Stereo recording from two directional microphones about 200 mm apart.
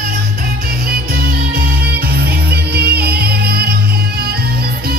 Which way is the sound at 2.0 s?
50° right (ahead or behind).